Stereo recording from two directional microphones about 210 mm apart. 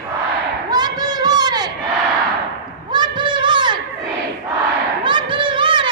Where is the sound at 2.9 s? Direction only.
20° right (ahead or behind).